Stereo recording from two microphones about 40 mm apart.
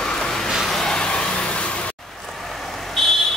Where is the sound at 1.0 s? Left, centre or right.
Left.